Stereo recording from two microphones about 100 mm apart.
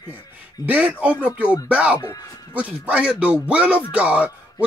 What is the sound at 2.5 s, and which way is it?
Speech, 15° right (ahead or behind).